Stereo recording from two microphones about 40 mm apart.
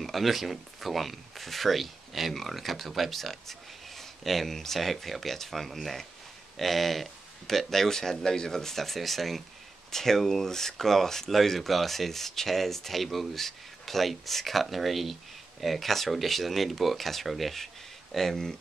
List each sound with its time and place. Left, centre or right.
0.0 s speech: centre